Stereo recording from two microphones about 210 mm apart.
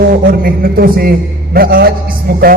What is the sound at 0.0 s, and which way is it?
A man's voice, 45° right (ahead or behind).